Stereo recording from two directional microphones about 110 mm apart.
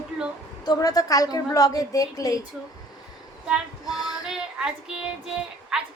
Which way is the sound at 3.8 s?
35° left (ahead or behind).